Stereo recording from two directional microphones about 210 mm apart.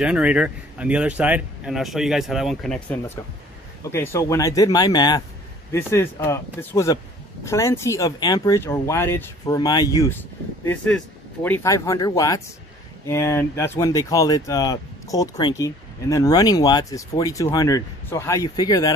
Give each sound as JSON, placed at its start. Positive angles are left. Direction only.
{"t": 0.0, "sound": "speech", "side_deg": -5}